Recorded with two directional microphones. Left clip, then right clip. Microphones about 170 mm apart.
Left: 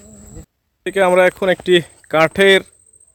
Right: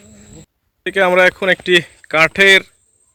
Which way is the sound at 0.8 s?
5° left (ahead or behind).